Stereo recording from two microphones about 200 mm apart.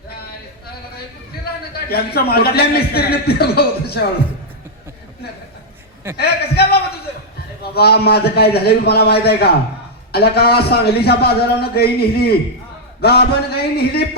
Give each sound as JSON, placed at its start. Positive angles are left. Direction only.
{"t": 1.9, "sound": "a man's voice", "side_deg": 50}
{"t": 6.1, "sound": "a man's voice", "side_deg": 50}